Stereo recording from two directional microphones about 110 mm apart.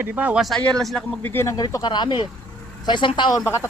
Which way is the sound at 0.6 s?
5° left (ahead or behind).